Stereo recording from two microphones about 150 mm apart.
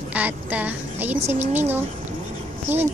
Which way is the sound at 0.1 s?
10° right (ahead or behind).